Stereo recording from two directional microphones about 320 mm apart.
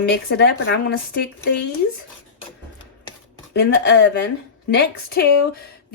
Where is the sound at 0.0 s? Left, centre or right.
Left.